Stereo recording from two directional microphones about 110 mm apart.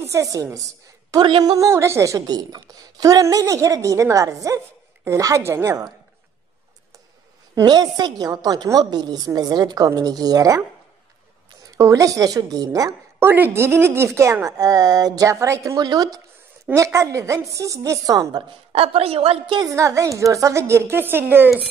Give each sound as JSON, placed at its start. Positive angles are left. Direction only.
{"t": 0.1, "sound": "a woman's voice", "side_deg": -30}
{"t": 7.5, "sound": "a woman's voice", "side_deg": -35}
{"t": 11.6, "sound": "a woman's voice", "side_deg": -30}
{"t": 13.3, "sound": "speech", "side_deg": -20}
{"t": 18.7, "sound": "a woman's voice", "side_deg": -65}
{"t": 19.4, "sound": "a woman's voice", "side_deg": -45}
{"t": 19.7, "sound": "speech", "side_deg": -30}